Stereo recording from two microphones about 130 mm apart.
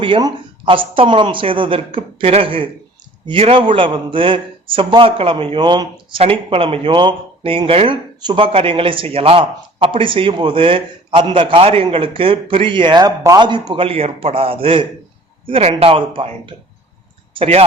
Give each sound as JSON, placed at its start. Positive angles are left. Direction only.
{"t": 0.0, "sound": "a man's voice", "side_deg": -35}
{"t": 17.3, "sound": "speech", "side_deg": -50}